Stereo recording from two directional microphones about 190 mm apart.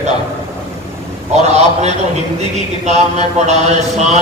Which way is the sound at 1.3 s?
35° right (ahead or behind).